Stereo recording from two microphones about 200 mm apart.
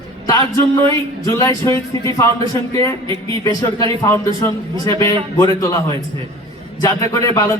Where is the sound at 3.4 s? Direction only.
20° left (ahead or behind).